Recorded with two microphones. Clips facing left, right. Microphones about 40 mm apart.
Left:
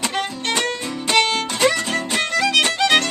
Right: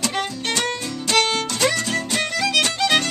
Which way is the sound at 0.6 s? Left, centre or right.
Centre.